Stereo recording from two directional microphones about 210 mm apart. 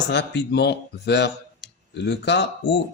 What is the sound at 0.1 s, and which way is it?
Speech, 55° left (ahead or behind).